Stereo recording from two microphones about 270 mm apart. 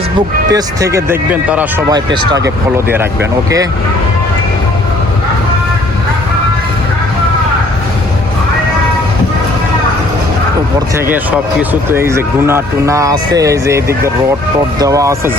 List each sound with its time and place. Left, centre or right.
0.5 s speech: centre
10.9 s speech: centre